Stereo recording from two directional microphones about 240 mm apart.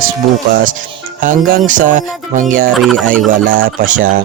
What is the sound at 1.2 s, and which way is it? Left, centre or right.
Speech, right.